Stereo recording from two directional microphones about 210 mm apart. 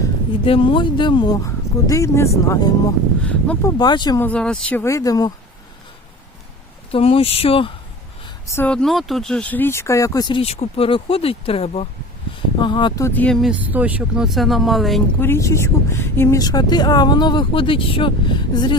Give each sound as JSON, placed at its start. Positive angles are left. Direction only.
{"t": 0.4, "sound": "speech", "side_deg": 25}
{"t": 3.8, "sound": "speech", "side_deg": 20}
{"t": 4.2, "sound": "speech", "side_deg": 5}
{"t": 6.9, "sound": "speech", "side_deg": 25}
{"t": 8.4, "sound": "speech", "side_deg": 10}
{"t": 13.1, "sound": "speech", "side_deg": 5}
{"t": 15.3, "sound": "speech", "side_deg": 15}